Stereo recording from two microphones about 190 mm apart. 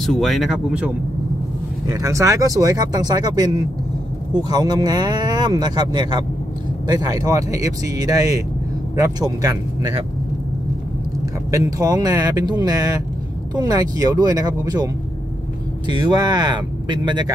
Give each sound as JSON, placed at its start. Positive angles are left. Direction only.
{"t": 0.0, "sound": "speech", "side_deg": 0}
{"t": 1.9, "sound": "speech", "side_deg": -15}
{"t": 11.5, "sound": "speech", "side_deg": -15}
{"t": 15.9, "sound": "speech", "side_deg": -20}